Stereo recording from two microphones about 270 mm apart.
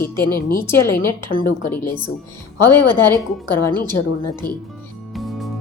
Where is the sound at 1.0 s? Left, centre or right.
Left.